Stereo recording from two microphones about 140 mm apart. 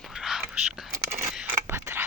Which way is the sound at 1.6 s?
15° right (ahead or behind).